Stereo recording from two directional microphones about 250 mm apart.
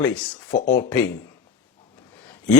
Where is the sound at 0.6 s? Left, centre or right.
Left.